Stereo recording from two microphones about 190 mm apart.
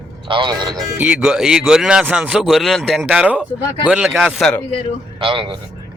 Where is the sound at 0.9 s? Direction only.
5° right (ahead or behind).